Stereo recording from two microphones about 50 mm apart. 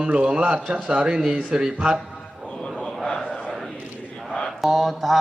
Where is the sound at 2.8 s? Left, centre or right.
Centre.